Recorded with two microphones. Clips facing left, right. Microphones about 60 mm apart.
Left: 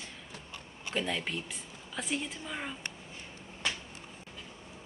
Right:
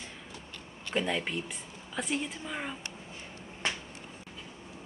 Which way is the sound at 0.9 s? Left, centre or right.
Centre.